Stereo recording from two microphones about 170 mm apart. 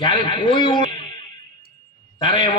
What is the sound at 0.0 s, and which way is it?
Speech, 25° left (ahead or behind).